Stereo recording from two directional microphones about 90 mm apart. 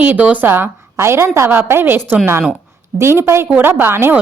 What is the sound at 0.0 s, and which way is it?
A woman's voice, 20° right (ahead or behind).